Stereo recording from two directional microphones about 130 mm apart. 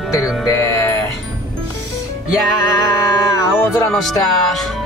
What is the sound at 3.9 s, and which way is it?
Speech, centre (ahead or behind).